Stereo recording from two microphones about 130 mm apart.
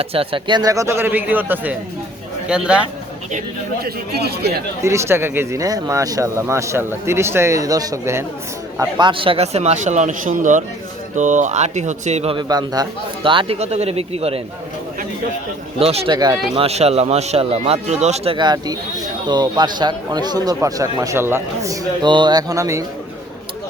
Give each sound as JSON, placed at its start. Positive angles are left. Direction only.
{"t": 0.0, "sound": "a man's voice", "side_deg": -45}
{"t": 4.8, "sound": "speech", "side_deg": -20}
{"t": 9.0, "sound": "a man's voice", "side_deg": -40}
{"t": 12.4, "sound": "a man's voice", "side_deg": -30}
{"t": 13.6, "sound": "speech", "side_deg": -55}
{"t": 15.8, "sound": "speech", "side_deg": -50}
{"t": 16.0, "sound": "a man's voice", "side_deg": -30}
{"t": 16.6, "sound": "speech", "side_deg": -55}
{"t": 18.3, "sound": "a man's voice", "side_deg": -30}
{"t": 22.0, "sound": "speech", "side_deg": -35}